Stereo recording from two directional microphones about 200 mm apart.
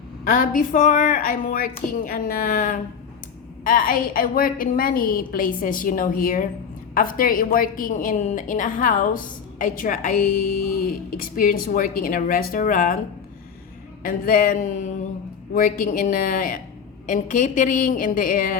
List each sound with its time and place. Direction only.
0.3 s a woman's voice: 40° left (ahead or behind)
14.0 s a woman's voice: 45° left (ahead or behind)